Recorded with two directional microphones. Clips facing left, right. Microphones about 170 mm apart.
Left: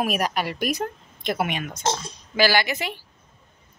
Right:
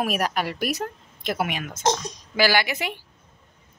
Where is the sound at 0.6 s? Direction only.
5° right (ahead or behind).